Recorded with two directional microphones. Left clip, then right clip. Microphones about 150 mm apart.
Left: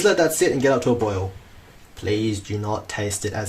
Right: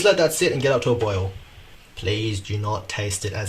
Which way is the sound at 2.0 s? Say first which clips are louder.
Left 2 dB; 55° left (ahead or behind).